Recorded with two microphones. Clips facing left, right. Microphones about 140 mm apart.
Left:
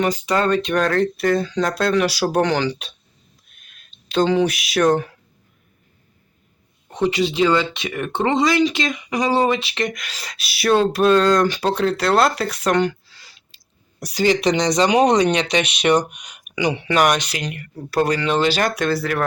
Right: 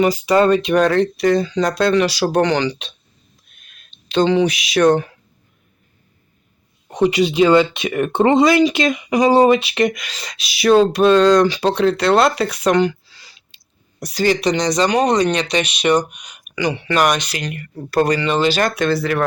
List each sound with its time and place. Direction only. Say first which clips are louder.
0.0 s speech: right 5 dB; 10° right (ahead or behind)
3.5 s a sound: right 1 dB; centre (ahead or behind)
4.1 s speech: right 2 dB; 5° left (ahead or behind)
6.9 s speech: right 4 dB; 15° right (ahead or behind); by 14.3 s 10° left (ahead or behind)
14.3 s speech: even; 20° left (ahead or behind)
14.8 s speech: left 1 dB; 5° left (ahead or behind)